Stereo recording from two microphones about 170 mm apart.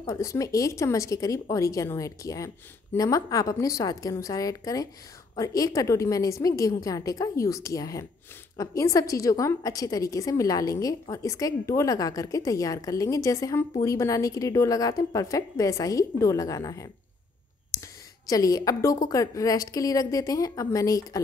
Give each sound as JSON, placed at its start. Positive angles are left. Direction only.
{"t": 0.0, "sound": "a woman's voice", "side_deg": 20}